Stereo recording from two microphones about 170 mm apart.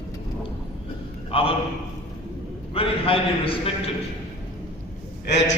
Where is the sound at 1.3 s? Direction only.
35° left (ahead or behind).